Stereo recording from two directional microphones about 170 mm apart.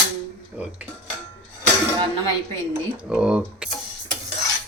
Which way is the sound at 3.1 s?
5° right (ahead or behind).